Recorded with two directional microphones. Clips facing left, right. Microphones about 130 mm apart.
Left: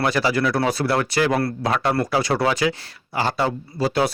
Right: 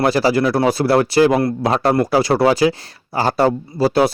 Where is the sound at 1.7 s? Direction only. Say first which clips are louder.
Right 5 dB; 35° right (ahead or behind).